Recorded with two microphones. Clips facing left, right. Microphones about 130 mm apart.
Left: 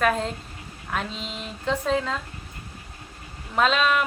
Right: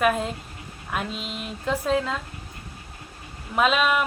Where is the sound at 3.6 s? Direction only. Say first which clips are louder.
Even; 5° right (ahead or behind).